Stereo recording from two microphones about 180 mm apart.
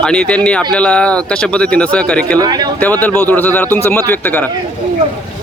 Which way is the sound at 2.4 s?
20° right (ahead or behind).